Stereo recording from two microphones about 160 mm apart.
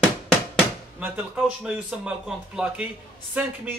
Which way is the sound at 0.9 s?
10° right (ahead or behind).